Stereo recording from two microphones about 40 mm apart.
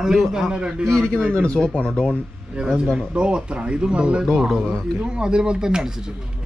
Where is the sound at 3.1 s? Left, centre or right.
Right.